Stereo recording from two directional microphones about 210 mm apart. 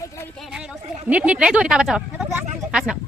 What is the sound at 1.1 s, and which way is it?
Speech, 5° right (ahead or behind).